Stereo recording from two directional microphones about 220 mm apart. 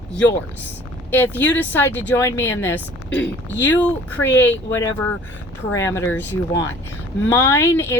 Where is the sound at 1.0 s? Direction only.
10° left (ahead or behind).